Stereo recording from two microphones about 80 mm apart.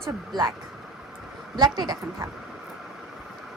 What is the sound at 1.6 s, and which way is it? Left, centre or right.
Speech, right.